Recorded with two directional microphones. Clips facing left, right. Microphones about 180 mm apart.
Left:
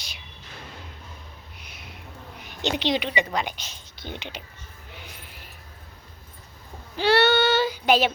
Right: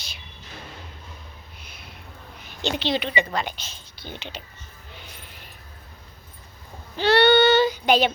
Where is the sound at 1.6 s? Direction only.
15° left (ahead or behind).